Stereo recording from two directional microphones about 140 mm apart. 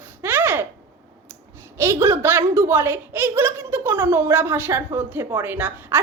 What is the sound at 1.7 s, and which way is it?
A woman's voice, 20° right (ahead or behind).